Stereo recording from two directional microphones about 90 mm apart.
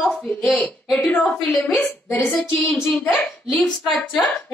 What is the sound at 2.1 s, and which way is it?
A woman's voice, 20° left (ahead or behind).